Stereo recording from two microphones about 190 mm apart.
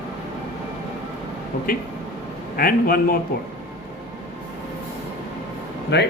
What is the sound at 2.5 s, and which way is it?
Speech, 50° left (ahead or behind).